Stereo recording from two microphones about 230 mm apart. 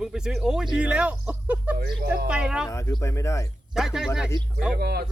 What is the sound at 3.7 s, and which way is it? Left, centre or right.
Speech, centre.